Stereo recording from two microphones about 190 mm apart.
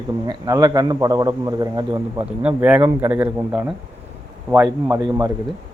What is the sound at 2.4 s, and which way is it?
A man's voice, 10° right (ahead or behind).